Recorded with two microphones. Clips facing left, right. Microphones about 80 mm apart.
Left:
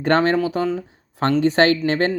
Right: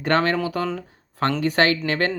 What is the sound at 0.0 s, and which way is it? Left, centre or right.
Speech, left.